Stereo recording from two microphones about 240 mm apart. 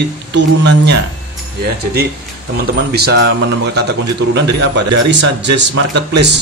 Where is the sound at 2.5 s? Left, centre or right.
Right.